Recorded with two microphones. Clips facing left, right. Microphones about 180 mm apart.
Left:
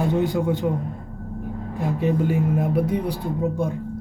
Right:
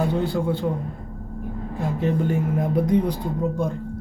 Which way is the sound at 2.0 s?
10° left (ahead or behind).